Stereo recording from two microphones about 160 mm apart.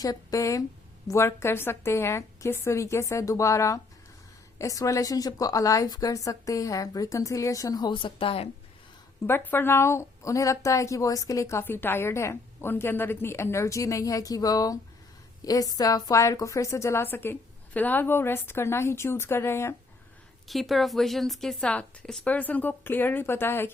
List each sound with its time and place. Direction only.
0.0 s a woman's voice: 20° left (ahead or behind)
9.2 s a woman's voice: 15° left (ahead or behind)
20.5 s speech: centre (ahead or behind)